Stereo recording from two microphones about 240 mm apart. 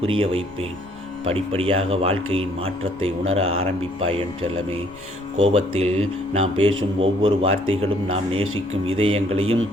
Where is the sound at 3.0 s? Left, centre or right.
Right.